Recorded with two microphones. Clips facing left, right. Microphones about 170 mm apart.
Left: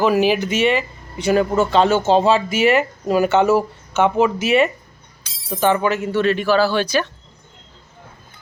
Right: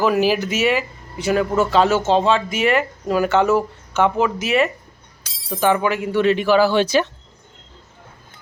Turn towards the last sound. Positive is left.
turn(degrees=-20)  # may be behind; listen again after turning